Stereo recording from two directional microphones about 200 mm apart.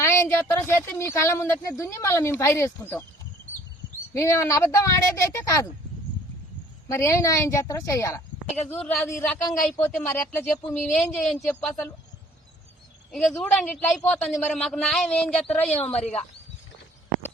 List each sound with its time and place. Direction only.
0.0 s speech: 15° left (ahead or behind)
4.1 s speech: 15° left (ahead or behind)
6.8 s a man's voice: 15° left (ahead or behind)
13.1 s a man's voice: centre (ahead or behind)
15.7 s speech: 30° left (ahead or behind)